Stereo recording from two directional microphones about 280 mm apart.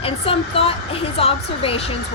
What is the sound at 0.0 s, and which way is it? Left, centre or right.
Speech, centre.